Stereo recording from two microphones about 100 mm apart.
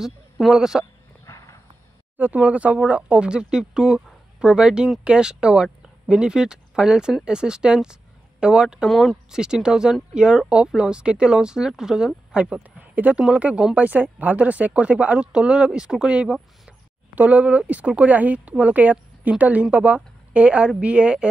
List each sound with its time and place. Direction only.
0.0 s speech: 5° right (ahead or behind)
1.2 s horse: 35° left (ahead or behind)
2.1 s speech: 15° right (ahead or behind)